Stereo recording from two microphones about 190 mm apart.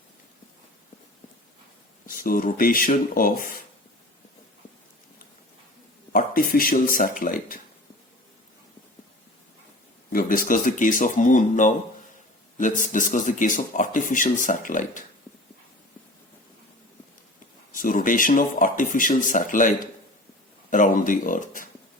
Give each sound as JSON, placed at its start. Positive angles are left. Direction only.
{"t": 2.0, "sound": "speech", "side_deg": 45}
{"t": 6.1, "sound": "speech", "side_deg": 45}
{"t": 10.1, "sound": "speech", "side_deg": 45}
{"t": 17.7, "sound": "speech", "side_deg": 45}